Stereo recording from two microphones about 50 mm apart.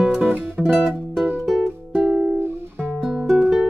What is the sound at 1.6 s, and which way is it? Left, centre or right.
Music, centre.